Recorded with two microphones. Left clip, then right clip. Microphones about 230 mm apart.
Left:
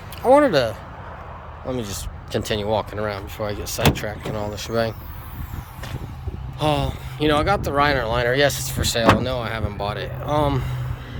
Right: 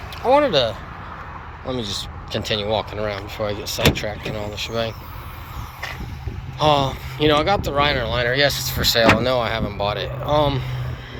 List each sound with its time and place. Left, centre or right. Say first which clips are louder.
0.2 s speech: left 1 dB; left
6.6 s speech: right 5 dB; centre